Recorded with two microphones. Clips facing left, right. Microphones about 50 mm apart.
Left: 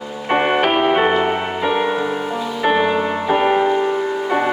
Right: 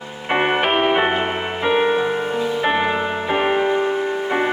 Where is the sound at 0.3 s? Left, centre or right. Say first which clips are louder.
Left 2 dB; centre.